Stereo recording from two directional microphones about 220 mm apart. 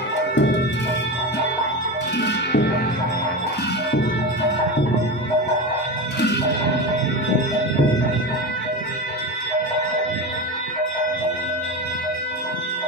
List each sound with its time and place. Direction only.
0.3 s music: 55° left (ahead or behind)
2.1 s cowbell: 50° left (ahead or behind)
6.1 s music: 50° left (ahead or behind)